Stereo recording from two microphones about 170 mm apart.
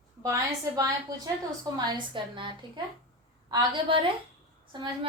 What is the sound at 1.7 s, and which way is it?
A woman's voice, 30° right (ahead or behind).